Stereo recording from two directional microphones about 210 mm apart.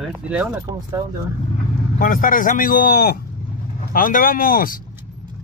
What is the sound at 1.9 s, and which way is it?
A man's voice, 40° left (ahead or behind).